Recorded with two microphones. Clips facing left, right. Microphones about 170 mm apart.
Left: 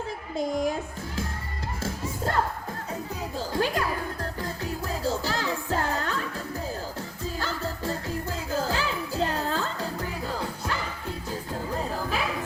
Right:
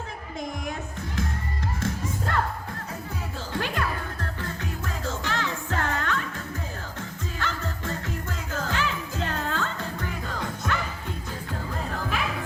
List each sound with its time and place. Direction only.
1.8 s music: 35° left (ahead or behind)
3.5 s music: 35° left (ahead or behind)
7.3 s music: 35° left (ahead or behind)